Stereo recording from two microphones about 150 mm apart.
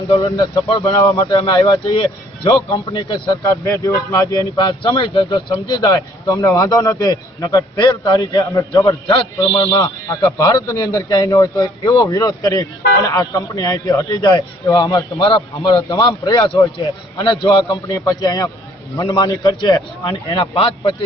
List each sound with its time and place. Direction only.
0.2 s a man's voice: 20° left (ahead or behind)
3.2 s speech: 20° left (ahead or behind)
4.8 s a man's voice: 35° left (ahead or behind)